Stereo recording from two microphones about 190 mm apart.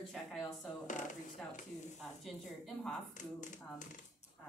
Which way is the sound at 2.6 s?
Centre (ahead or behind).